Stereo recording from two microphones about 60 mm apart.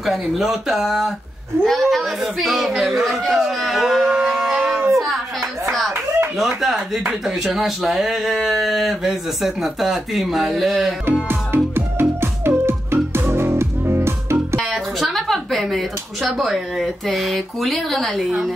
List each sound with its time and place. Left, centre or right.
0.0 s speech: centre
4.9 s a sound: centre
5.7 s clapping: centre
6.3 s speech: centre
11.2 s music: right
14.6 s a sound: centre
16.4 s speech: centre